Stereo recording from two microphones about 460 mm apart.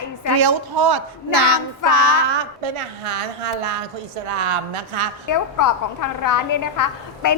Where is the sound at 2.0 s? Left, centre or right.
Right.